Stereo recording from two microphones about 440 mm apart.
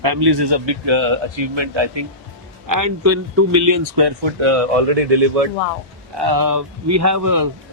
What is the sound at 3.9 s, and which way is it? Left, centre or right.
Speech, right.